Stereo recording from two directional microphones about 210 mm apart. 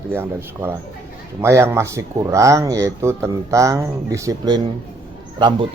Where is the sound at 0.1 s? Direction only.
10° right (ahead or behind).